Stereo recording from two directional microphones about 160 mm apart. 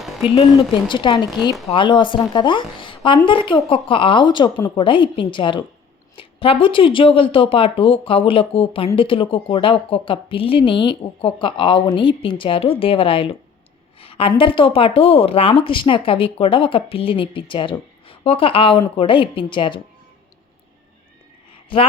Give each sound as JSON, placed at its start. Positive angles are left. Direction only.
{"t": 0.5, "sound": "a woman's voice", "side_deg": 30}